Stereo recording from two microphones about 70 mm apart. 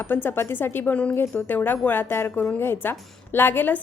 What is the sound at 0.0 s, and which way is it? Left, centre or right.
A woman's voice, left.